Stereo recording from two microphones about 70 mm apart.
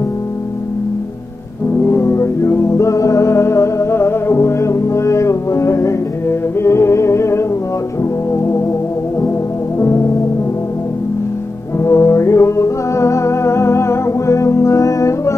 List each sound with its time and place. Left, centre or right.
1.9 s music: left
8.0 s organ: left
9.8 s music: left
11.8 s music: left